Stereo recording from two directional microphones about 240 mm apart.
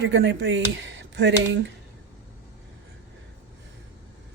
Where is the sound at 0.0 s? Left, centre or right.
Right.